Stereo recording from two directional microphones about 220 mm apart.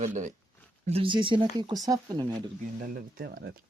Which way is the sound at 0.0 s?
35° right (ahead or behind).